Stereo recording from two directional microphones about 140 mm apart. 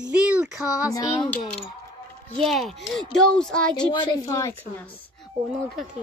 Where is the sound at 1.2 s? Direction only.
5° left (ahead or behind).